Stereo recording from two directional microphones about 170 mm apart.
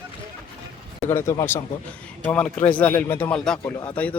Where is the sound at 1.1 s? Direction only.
15° left (ahead or behind).